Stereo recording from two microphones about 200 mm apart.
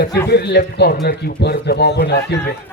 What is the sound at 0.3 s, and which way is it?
A man's voice, 55° left (ahead or behind).